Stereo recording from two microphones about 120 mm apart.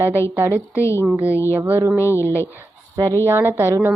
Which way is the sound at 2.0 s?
25° left (ahead or behind).